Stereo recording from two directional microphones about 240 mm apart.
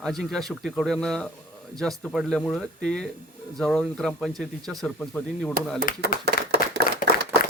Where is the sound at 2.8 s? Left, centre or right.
Right.